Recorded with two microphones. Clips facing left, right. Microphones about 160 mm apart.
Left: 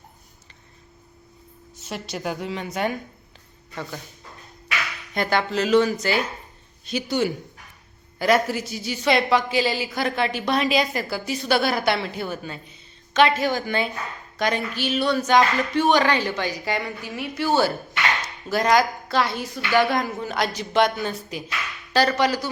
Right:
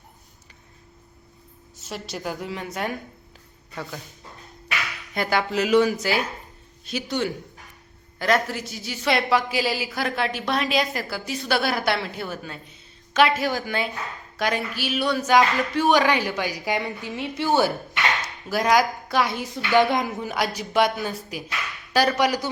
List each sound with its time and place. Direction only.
1.8 s speech: centre (ahead or behind)
8.4 s a woman's voice: centre (ahead or behind); by 18.1 s 20° right (ahead or behind)
18.4 s a woman's voice: 10° right (ahead or behind)